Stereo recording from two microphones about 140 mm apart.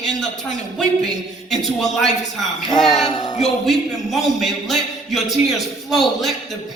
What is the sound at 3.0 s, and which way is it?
Speech, 30° left (ahead or behind).